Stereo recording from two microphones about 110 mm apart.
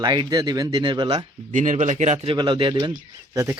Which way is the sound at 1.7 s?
90° right.